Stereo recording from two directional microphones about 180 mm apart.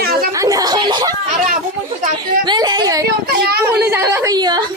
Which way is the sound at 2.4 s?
25° right (ahead or behind).